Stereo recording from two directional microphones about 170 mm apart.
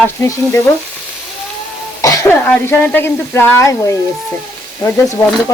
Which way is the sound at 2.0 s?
20° left (ahead or behind).